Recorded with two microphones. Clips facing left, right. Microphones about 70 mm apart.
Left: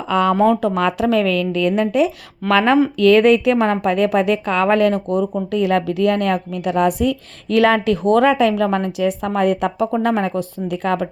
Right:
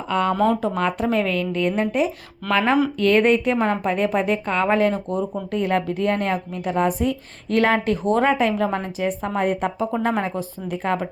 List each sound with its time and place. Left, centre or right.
0.2 s a woman's voice: left
10.0 s a woman's voice: left